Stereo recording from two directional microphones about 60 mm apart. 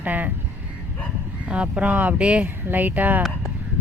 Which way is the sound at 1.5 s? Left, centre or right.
Centre.